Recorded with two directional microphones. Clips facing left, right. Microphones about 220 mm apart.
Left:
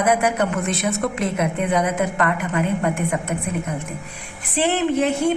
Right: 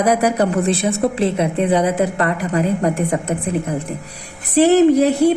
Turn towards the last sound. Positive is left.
turn(degrees=-35)  # may be behind; listen again after turning